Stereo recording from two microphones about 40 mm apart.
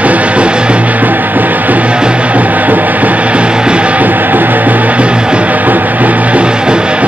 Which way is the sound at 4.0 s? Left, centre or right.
Right.